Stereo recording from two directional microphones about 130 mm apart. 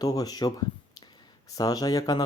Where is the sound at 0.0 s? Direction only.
30° left (ahead or behind).